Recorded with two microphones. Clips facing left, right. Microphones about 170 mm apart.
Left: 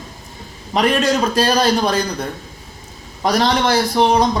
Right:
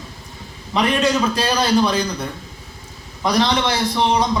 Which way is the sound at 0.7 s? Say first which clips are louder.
Left 2 dB; 45° left (ahead or behind).